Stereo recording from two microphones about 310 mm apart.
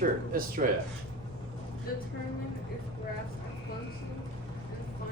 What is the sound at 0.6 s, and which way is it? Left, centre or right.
Speech, right.